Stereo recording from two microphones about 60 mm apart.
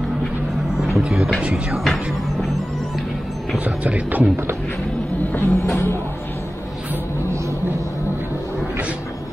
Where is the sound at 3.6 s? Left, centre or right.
Right.